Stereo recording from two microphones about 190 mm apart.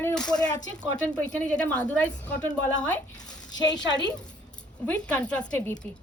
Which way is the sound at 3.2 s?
20° left (ahead or behind).